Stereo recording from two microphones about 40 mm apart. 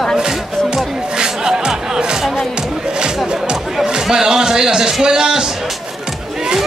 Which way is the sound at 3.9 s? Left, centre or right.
Centre.